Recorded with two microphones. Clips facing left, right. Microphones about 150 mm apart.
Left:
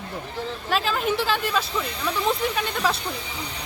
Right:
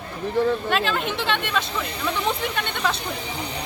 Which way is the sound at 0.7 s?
Centre (ahead or behind).